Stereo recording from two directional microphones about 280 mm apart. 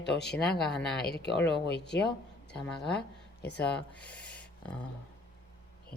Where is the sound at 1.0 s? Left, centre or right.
Left.